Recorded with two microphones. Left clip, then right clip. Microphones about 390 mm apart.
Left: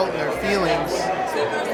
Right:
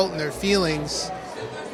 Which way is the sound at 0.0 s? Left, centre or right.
Right.